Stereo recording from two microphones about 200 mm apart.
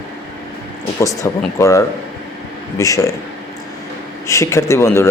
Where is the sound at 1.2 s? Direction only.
15° left (ahead or behind).